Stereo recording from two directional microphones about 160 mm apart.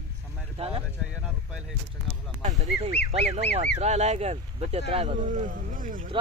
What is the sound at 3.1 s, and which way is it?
Speech, 40° right (ahead or behind).